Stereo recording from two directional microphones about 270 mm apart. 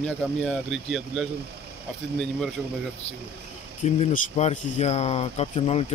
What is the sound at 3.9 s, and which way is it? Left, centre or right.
Speech, left.